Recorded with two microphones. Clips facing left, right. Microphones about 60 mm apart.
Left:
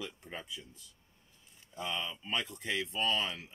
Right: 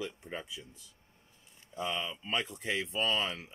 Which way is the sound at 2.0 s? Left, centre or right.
Right.